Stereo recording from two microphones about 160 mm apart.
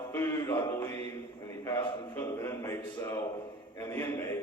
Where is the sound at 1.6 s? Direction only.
15° left (ahead or behind).